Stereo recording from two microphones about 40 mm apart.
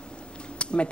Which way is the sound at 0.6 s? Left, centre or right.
Left.